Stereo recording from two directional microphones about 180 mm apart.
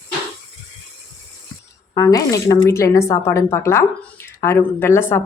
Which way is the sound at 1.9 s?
20° left (ahead or behind).